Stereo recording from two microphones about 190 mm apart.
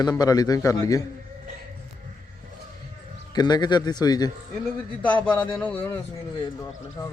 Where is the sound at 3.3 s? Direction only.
20° left (ahead or behind).